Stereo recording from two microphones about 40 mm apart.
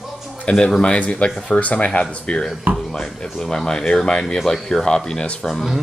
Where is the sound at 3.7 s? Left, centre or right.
Centre.